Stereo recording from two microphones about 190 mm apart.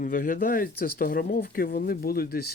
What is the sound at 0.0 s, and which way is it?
Speech, 45° left (ahead or behind).